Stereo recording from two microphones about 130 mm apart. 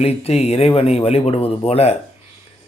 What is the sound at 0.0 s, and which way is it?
A man's voice, 50° left (ahead or behind).